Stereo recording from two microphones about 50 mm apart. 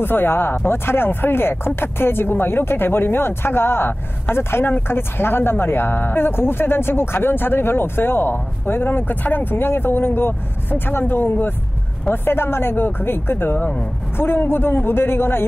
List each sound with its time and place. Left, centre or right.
0.0 s speech: left
14.1 s speech: left